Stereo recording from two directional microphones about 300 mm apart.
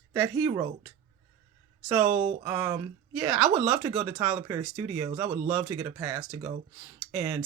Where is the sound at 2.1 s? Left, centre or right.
Right.